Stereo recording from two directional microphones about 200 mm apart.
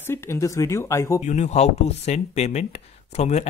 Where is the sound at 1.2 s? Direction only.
35° left (ahead or behind).